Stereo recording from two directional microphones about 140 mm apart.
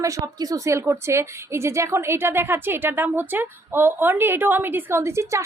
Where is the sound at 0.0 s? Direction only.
25° right (ahead or behind).